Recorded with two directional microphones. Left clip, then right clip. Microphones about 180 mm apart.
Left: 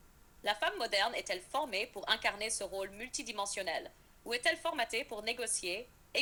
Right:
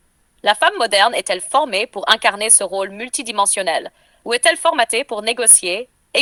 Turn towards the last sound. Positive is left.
turn(degrees=-45)  # may be behind; listen again after turning